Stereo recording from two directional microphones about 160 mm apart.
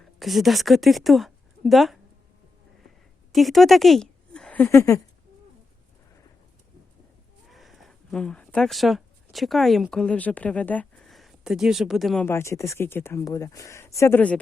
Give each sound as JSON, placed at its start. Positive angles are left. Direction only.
{"t": 0.2, "sound": "a woman's voice", "side_deg": 0}
{"t": 3.3, "sound": "a woman's voice", "side_deg": 0}
{"t": 7.5, "sound": "speech", "side_deg": 0}
{"t": 12.2, "sound": "speech", "side_deg": 15}